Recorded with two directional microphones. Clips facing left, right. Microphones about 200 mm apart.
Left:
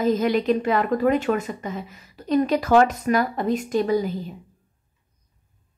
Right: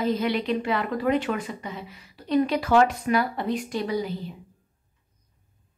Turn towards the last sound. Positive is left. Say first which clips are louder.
# left 6 dB
turn(degrees=45)  # may be behind; listen again after turning